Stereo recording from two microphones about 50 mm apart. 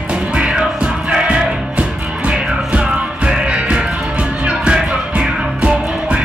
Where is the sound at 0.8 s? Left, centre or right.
Right.